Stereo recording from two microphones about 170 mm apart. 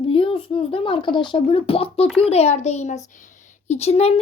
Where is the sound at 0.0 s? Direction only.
30° left (ahead or behind).